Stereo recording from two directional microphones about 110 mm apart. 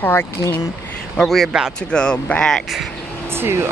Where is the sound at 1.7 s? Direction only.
10° left (ahead or behind).